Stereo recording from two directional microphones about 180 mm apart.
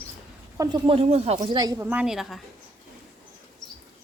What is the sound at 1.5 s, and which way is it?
Speech, 20° right (ahead or behind).